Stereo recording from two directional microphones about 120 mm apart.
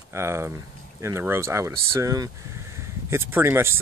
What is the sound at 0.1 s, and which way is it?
Speech, 25° right (ahead or behind).